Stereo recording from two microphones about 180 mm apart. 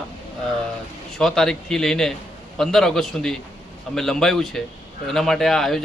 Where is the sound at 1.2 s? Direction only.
5° left (ahead or behind).